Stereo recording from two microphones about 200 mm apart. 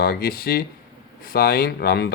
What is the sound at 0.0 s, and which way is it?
Speech, 50° left (ahead or behind).